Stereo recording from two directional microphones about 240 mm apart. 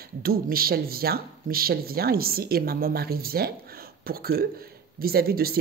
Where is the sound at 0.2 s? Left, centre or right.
Right.